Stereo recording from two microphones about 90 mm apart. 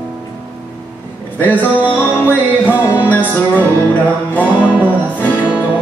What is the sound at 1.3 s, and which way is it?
Music, 20° left (ahead or behind).